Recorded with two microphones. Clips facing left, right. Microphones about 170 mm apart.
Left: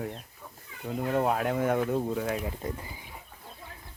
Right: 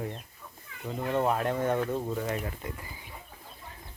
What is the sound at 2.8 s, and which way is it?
Speech, 20° left (ahead or behind).